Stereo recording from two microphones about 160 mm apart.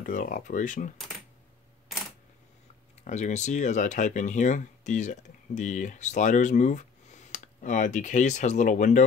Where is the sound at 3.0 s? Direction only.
45° left (ahead or behind).